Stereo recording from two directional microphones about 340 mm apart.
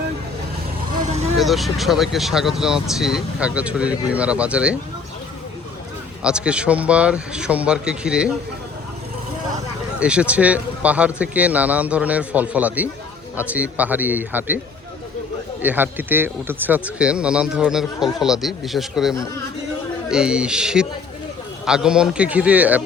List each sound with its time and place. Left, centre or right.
0.9 s vehicle: centre
1.4 s speech: centre
6.2 s speech: centre
10.0 s speech: centre
15.6 s speech: centre